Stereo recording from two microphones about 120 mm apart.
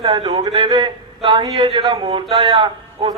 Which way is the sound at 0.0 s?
45° right (ahead or behind).